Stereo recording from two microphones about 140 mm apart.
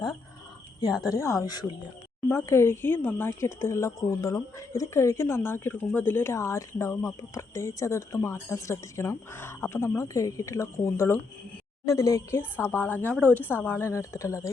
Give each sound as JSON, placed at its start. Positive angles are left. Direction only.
{"t": 0.8, "sound": "a woman's voice", "side_deg": 25}